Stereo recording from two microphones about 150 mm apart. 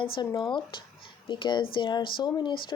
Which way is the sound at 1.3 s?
30° left (ahead or behind).